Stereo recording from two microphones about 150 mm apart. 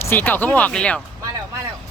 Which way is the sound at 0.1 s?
15° left (ahead or behind).